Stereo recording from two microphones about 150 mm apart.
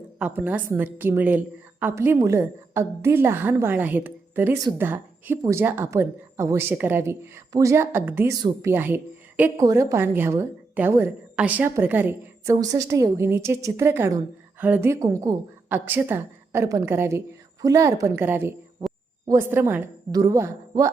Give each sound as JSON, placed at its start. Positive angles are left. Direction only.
{"t": 0.2, "sound": "a woman's voice", "side_deg": -10}
{"t": 8.4, "sound": "a woman's voice", "side_deg": -25}
{"t": 8.7, "sound": "a woman's voice", "side_deg": -15}
{"t": 12.5, "sound": "a woman's voice", "side_deg": -25}
{"t": 15.7, "sound": "a woman's voice", "side_deg": -15}
{"t": 20.1, "sound": "a woman's voice", "side_deg": -25}